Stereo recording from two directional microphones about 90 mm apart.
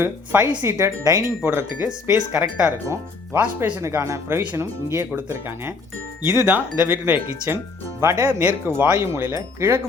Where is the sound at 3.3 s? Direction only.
25° right (ahead or behind).